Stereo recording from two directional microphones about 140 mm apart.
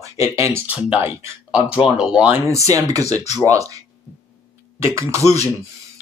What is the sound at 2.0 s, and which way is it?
Speech, 5° right (ahead or behind).